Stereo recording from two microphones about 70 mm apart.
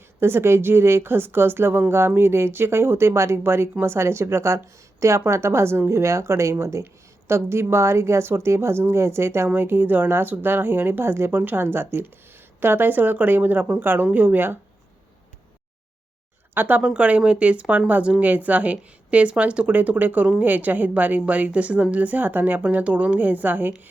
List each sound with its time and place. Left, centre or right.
0.2 s speech: right
16.6 s a woman's voice: right